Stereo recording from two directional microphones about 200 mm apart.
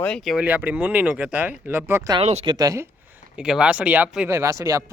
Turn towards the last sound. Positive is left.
turn(degrees=-15)  # may be behind; listen again after turning